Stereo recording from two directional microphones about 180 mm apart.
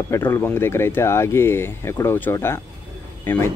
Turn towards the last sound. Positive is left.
turn(degrees=10)  # may be behind; listen again after turning